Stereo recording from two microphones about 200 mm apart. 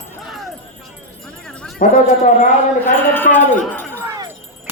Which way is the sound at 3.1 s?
10° left (ahead or behind).